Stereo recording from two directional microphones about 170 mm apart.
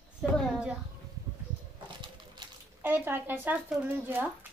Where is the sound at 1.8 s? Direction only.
25° right (ahead or behind).